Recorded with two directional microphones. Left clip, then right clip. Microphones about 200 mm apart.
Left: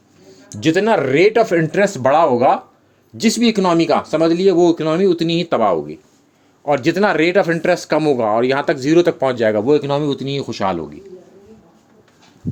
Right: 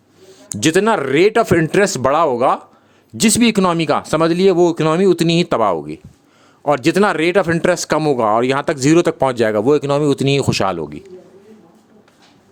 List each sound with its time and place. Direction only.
0.5 s speech: 35° right (ahead or behind)